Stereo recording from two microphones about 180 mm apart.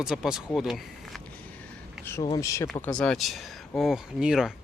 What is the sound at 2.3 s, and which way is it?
Speech, 20° left (ahead or behind).